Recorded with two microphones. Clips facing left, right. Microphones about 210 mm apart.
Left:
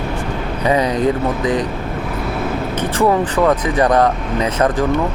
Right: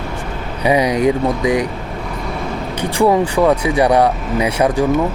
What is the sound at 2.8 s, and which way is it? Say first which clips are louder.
Speech: right 2 dB; 10° right (ahead or behind).